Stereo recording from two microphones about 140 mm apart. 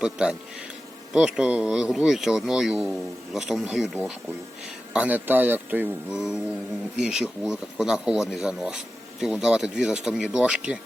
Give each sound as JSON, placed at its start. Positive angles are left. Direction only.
{"t": 0.0, "sound": "speech", "side_deg": -5}
{"t": 4.9, "sound": "speech", "side_deg": -10}